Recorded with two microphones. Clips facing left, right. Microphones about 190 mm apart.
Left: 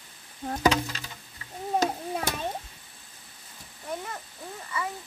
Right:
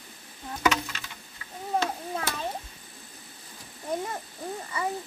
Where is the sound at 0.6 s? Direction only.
30° left (ahead or behind).